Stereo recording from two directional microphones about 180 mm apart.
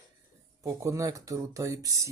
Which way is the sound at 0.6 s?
20° right (ahead or behind).